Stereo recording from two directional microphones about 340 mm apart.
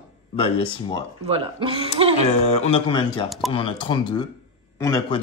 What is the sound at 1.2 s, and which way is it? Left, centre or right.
Speech, centre.